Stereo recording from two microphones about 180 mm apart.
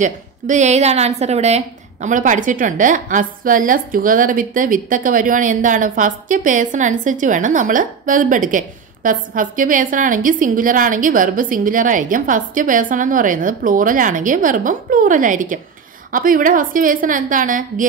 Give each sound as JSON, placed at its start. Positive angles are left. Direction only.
{"t": 0.0, "sound": "a woman's voice", "side_deg": -40}